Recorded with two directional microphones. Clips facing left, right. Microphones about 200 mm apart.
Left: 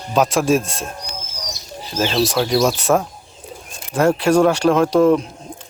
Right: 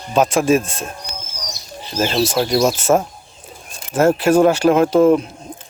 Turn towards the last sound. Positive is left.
turn(degrees=-5)  # may be behind; listen again after turning